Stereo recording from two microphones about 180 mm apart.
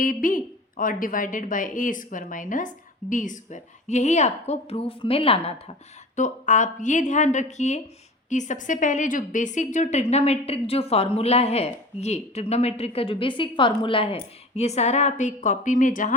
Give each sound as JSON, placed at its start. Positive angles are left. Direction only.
{"t": 0.0, "sound": "a woman's voice", "side_deg": 50}
{"t": 6.1, "sound": "a woman's voice", "side_deg": 45}